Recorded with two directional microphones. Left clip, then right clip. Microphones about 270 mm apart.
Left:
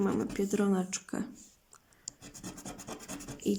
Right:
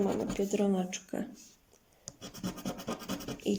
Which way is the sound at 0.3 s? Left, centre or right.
Left.